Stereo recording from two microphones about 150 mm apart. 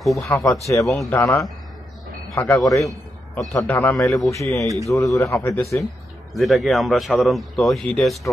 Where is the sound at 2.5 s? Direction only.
Centre (ahead or behind).